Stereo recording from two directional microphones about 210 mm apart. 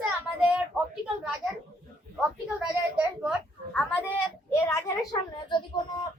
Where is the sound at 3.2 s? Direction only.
Centre (ahead or behind); by 5.8 s 20° left (ahead or behind).